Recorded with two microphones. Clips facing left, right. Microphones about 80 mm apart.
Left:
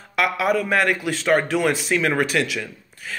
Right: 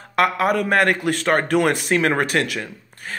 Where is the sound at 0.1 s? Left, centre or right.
Right.